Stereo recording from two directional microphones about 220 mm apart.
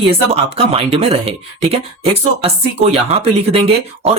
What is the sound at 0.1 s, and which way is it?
Speech, 25° right (ahead or behind).